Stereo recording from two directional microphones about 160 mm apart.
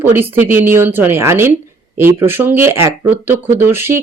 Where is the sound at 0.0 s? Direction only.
10° right (ahead or behind).